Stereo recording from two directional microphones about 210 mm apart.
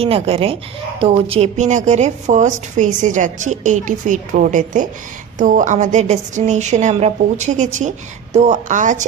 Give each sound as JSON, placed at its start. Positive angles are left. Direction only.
{"t": 0.0, "sound": "speech", "side_deg": -25}